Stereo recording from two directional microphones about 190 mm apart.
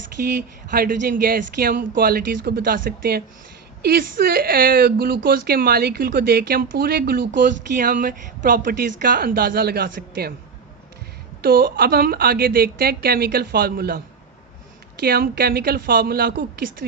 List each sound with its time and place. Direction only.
0.7 s speech: 45° right (ahead or behind)
11.4 s a woman's voice: 50° right (ahead or behind)